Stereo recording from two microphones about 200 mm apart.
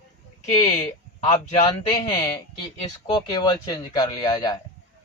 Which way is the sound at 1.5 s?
20° left (ahead or behind).